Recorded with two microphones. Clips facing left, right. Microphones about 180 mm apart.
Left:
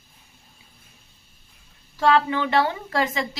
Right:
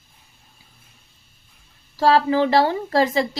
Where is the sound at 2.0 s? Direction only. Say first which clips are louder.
Right 3 dB; 35° right (ahead or behind).